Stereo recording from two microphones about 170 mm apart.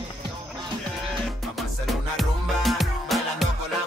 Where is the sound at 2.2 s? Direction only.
Centre (ahead or behind).